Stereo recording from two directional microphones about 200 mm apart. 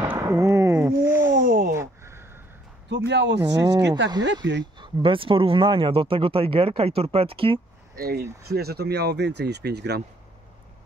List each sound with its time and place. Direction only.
0.1 s speech: 15° right (ahead or behind)
1.3 s a sound: 45° right (ahead or behind)
1.7 s a sound: 15° right (ahead or behind)
3.1 s speech: 60° right (ahead or behind)
3.4 s speech: 20° right (ahead or behind)
4.4 s speech: 65° right (ahead or behind)
4.7 s speech: 25° right (ahead or behind)
7.9 s speech: 50° right (ahead or behind)